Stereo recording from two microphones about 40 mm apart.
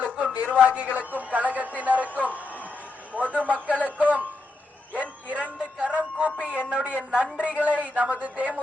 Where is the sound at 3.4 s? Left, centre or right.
Right.